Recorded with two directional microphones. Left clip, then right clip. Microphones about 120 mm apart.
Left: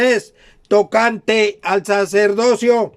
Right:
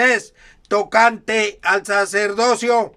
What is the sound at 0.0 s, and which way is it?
Speech, 40° left (ahead or behind).